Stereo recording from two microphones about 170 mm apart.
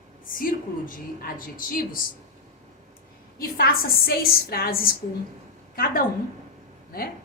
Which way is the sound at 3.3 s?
60° left (ahead or behind).